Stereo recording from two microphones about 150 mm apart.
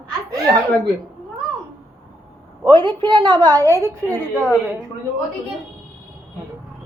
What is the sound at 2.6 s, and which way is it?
A woman's voice, 35° right (ahead or behind).